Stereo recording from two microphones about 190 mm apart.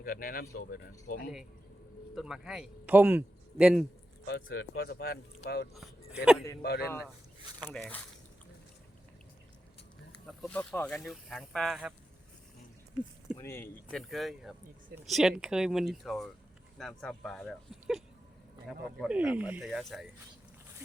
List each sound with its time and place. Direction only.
0.0 s speech: 45° left (ahead or behind)
2.1 s a man's voice: 5° right (ahead or behind)
4.3 s speech: 70° left (ahead or behind)
5.7 s speech: 5° right (ahead or behind)
6.6 s speech: 55° left (ahead or behind)
7.7 s speech: 10° left (ahead or behind)
10.2 s a man's voice: 5° left (ahead or behind)
13.3 s speech: 15° left (ahead or behind)
13.9 s a man's voice: centre (ahead or behind)